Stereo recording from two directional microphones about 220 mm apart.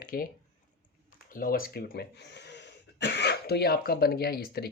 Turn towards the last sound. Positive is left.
turn(degrees=45)  # may be behind; listen again after turning